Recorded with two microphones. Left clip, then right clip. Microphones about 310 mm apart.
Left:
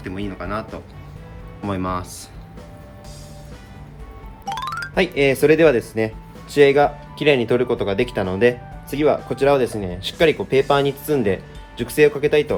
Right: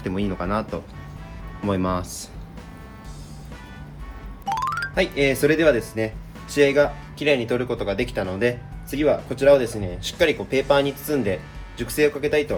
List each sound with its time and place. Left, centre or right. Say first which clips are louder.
0.0 s speech: right 2 dB; centre
4.4 s music: right 2 dB; centre
4.9 s speech: left 4 dB; left